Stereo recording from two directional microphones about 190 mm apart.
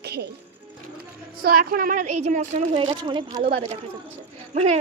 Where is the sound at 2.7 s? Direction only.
25° right (ahead or behind).